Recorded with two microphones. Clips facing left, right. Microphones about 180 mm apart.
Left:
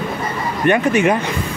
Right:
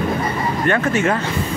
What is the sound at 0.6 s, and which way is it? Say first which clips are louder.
Speech: left 4 dB; 15° left (ahead or behind).